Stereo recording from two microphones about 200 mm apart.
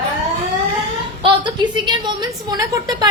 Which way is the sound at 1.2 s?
25° right (ahead or behind).